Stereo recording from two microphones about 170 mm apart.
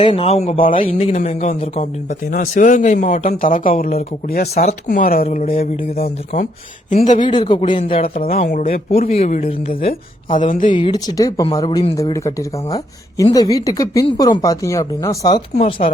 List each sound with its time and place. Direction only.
0.0 s a man's voice: 35° left (ahead or behind); by 5.2 s 55° left (ahead or behind)
5.2 s a man's voice: 40° left (ahead or behind)
7.3 s speech: 25° left (ahead or behind)
8.2 s speech: 60° left (ahead or behind)
9.0 s a man's voice: 40° left (ahead or behind)
10.3 s speech: 50° left (ahead or behind)
10.8 s speech: 25° left (ahead or behind)
15.5 s a man's voice: 35° left (ahead or behind)